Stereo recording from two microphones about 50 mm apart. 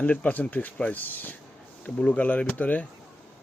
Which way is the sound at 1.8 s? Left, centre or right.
Left.